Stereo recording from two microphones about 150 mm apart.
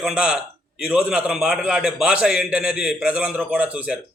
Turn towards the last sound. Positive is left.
turn(degrees=-10)  # may be behind; listen again after turning